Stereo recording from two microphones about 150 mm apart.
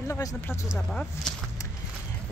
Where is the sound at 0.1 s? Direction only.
20° left (ahead or behind).